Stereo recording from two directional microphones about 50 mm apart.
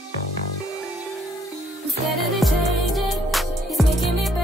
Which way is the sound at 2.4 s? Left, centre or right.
Centre.